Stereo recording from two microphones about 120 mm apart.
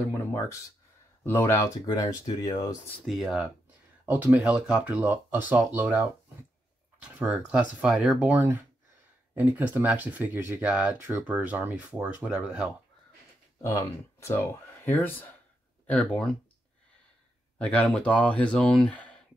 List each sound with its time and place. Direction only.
0.1 s speech: 20° left (ahead or behind)
1.9 s speech: 30° left (ahead or behind)
3.1 s speech: centre (ahead or behind)
4.0 s speech: 15° right (ahead or behind)
13.6 s speech: 20° left (ahead or behind); by 16.3 s 5° left (ahead or behind)
17.6 s speech: 10° left (ahead or behind)